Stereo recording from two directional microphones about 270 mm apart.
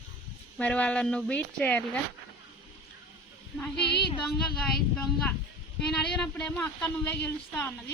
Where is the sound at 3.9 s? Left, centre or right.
Left.